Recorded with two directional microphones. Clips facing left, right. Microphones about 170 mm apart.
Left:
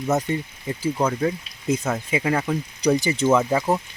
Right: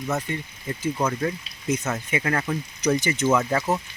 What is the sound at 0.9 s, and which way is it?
Speech, 10° left (ahead or behind).